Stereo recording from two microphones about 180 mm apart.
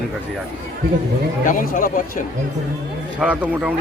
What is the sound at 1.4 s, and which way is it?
Speech, 50° left (ahead or behind).